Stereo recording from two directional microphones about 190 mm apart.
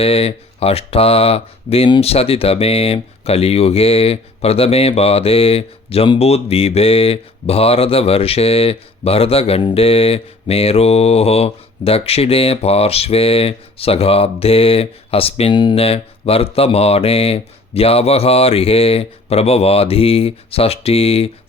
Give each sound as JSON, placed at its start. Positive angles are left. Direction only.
{"t": 0.0, "sound": "speech", "side_deg": 30}